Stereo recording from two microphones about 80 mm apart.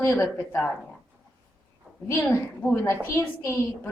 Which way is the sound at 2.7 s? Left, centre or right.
Left.